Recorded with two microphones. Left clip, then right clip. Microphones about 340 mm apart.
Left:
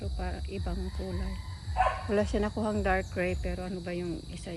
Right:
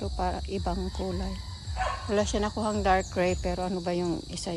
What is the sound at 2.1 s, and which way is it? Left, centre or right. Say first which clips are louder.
Speech: right 2 dB; centre.